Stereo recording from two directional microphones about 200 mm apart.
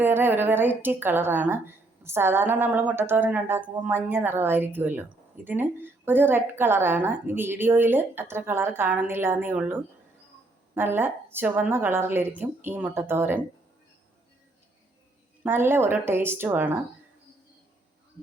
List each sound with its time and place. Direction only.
0.0 s a woman's voice: 10° right (ahead or behind)
15.4 s a woman's voice: 10° right (ahead or behind)